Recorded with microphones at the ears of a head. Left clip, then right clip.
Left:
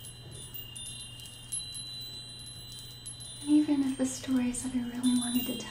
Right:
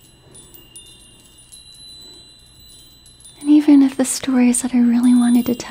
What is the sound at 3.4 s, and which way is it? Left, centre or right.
Speech, right.